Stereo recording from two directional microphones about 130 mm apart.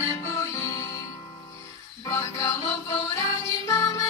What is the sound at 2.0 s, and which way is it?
Music, 25° left (ahead or behind).